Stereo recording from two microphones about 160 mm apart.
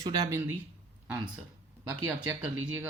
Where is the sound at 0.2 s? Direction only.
15° right (ahead or behind).